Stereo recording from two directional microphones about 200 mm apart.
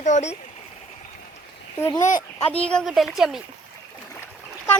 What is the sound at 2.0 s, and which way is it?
Speech, 40° left (ahead or behind).